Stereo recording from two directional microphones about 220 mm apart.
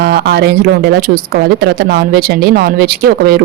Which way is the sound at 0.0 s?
45° right (ahead or behind).